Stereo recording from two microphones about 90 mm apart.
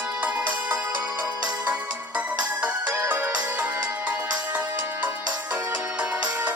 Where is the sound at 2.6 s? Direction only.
20° right (ahead or behind).